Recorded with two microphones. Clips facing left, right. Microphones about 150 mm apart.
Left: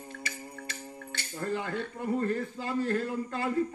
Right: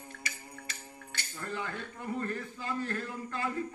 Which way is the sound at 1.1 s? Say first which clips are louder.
Left 7 dB; 35° left (ahead or behind).